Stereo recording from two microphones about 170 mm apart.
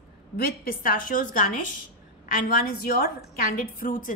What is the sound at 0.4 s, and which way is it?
A woman's voice, 60° left (ahead or behind).